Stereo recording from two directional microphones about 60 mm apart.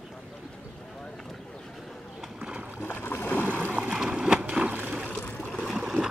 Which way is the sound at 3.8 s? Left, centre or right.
Centre.